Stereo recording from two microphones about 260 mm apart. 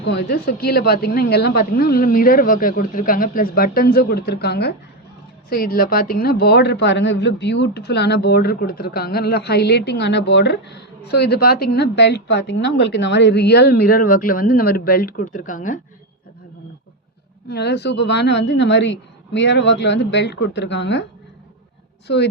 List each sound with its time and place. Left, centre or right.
0.0 s speech: left
17.5 s a woman's voice: left